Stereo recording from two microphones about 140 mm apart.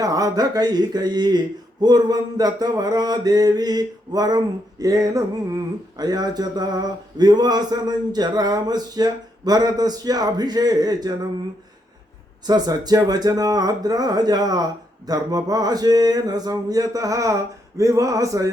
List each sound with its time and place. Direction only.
0.0 s mantra: 25° right (ahead or behind)
12.5 s mantra: 30° right (ahead or behind)